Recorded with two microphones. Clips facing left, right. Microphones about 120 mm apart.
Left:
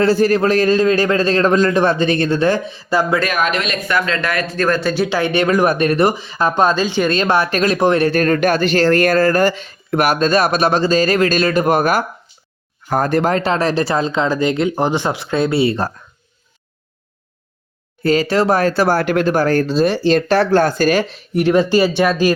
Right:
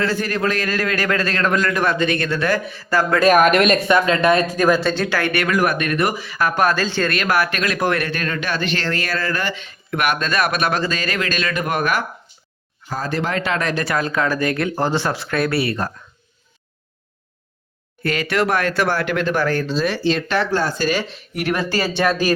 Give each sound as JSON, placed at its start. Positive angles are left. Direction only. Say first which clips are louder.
{"t": 0.0, "sound": "a man's voice", "louder": "left 7 dB", "side_deg": 35}
{"t": 3.2, "sound": "speech", "louder": "right 6 dB", "side_deg": -50}
{"t": 3.8, "sound": "speech", "louder": "right 4 dB", "side_deg": -20}
{"t": 4.8, "sound": "speech", "louder": "left 3 dB", "side_deg": 5}
{"t": 5.0, "sound": "a man's voice", "louder": "left 4 dB", "side_deg": 20}
{"t": 7.1, "sound": "a man's voice", "louder": "left 4 dB", "side_deg": 25}
{"t": 8.1, "sound": "speech", "louder": "left 10 dB", "side_deg": 45}
{"t": 12.9, "sound": "a man's voice", "louder": "left 7 dB", "side_deg": 55}
{"t": 18.0, "sound": "speech", "louder": "left 5 dB", "side_deg": 35}
{"t": 20.6, "sound": "speech", "louder": "left 6 dB", "side_deg": 50}
{"t": 21.3, "sound": "a man's voice", "louder": "left 8 dB", "side_deg": 25}